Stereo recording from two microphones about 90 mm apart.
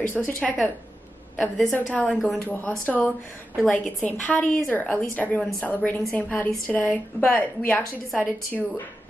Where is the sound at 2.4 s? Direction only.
20° left (ahead or behind).